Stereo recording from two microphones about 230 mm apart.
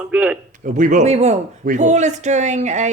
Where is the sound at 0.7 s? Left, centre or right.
Right.